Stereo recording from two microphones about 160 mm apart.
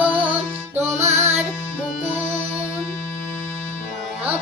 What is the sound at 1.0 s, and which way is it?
Music, 45° right (ahead or behind).